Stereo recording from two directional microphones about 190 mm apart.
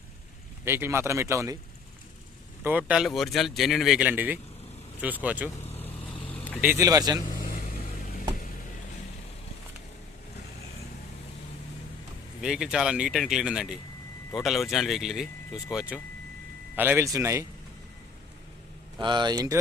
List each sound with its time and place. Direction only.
0.6 s speech: 15° right (ahead or behind)
2.6 s speech: 5° right (ahead or behind)
5.7 s vehicle: 30° left (ahead or behind)
6.6 s speech: 15° right (ahead or behind)
12.4 s speech: 5° right (ahead or behind)
19.0 s speech: 20° right (ahead or behind)